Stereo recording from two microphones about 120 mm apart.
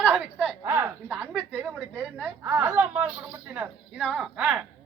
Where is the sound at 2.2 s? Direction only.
20° right (ahead or behind).